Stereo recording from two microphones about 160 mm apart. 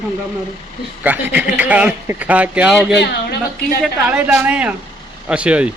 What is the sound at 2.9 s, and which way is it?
Speech, 90° left.